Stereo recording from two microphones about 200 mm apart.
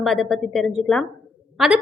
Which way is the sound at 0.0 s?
Centre (ahead or behind).